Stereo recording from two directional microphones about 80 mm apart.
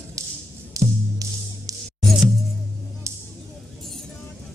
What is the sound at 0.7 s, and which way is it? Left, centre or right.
Music, right.